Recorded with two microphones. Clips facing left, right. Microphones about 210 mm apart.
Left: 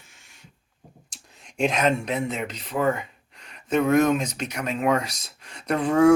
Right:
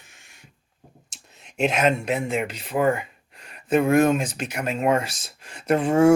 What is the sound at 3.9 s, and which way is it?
Speech, 5° right (ahead or behind).